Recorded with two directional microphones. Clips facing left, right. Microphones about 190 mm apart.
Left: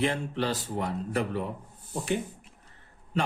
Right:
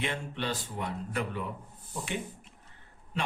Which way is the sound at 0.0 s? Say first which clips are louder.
Left 6 dB; 40° left (ahead or behind).